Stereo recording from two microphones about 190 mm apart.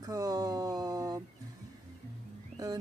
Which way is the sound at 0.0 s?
20° right (ahead or behind).